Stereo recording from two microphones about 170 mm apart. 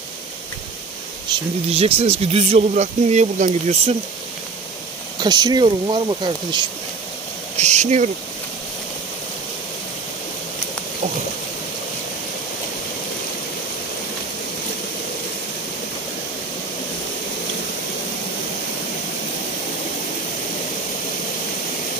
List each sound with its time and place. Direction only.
1.3 s speech: 35° right (ahead or behind)
5.2 s speech: 25° right (ahead or behind)
7.5 s speech: 40° right (ahead or behind)